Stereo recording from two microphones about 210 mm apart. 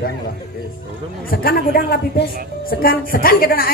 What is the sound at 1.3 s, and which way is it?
A woman's voice, 45° left (ahead or behind).